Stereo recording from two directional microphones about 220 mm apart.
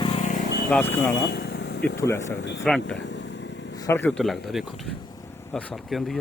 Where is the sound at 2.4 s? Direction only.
55° left (ahead or behind).